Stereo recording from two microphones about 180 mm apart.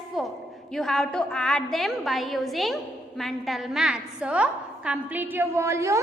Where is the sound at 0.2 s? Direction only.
Centre (ahead or behind).